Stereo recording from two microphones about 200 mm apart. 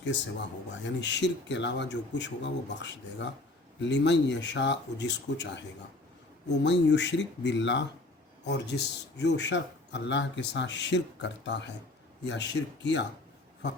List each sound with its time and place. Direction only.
0.0 s speech: 65° left (ahead or behind)